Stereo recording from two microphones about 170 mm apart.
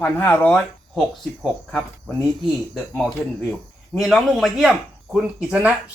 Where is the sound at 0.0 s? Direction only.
10° left (ahead or behind).